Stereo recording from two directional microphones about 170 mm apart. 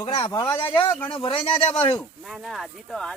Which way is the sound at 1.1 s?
30° left (ahead or behind).